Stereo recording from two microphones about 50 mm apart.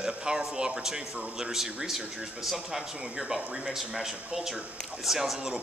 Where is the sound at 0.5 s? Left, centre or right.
Centre.